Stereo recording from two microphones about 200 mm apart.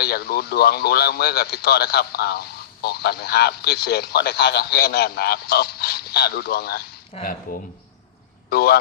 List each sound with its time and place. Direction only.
0.0 s speech: 50° left (ahead or behind)
7.1 s speech: 40° left (ahead or behind)
8.4 s speech: 50° left (ahead or behind)